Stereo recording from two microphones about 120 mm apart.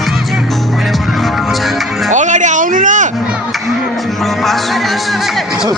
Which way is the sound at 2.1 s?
90° right.